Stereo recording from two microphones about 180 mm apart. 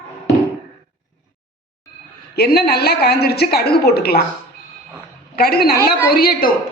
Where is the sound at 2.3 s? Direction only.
60° left (ahead or behind).